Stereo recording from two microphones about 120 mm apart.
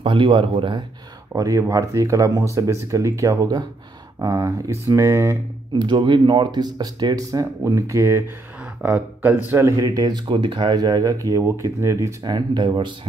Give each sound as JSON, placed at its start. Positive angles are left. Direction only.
{"t": 0.0, "sound": "speech", "side_deg": -45}
{"t": 1.3, "sound": "speech", "side_deg": -30}
{"t": 5.8, "sound": "speech", "side_deg": -40}
{"t": 12.2, "sound": "speech", "side_deg": -35}